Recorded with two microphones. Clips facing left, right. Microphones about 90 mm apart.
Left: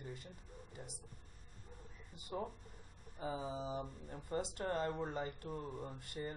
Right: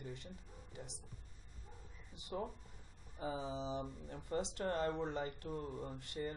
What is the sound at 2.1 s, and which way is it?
Speech, 45° left (ahead or behind).